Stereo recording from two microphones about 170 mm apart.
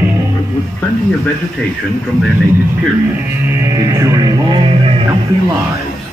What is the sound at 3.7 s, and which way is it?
Music, 20° right (ahead or behind).